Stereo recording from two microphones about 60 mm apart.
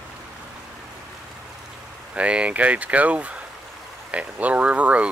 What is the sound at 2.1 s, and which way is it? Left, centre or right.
Speech, centre.